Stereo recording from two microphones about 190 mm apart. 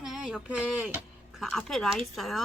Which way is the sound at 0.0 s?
5° right (ahead or behind).